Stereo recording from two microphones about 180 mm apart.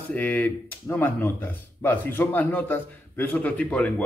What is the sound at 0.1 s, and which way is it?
Speech, 10° left (ahead or behind).